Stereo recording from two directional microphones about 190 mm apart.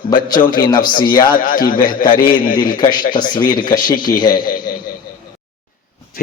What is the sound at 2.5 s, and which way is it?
Speech, 25° left (ahead or behind).